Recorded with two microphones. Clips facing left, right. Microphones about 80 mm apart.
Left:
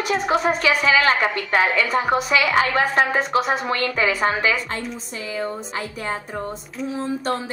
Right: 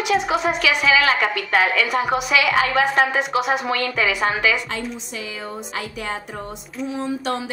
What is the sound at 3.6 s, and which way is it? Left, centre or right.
Music, left.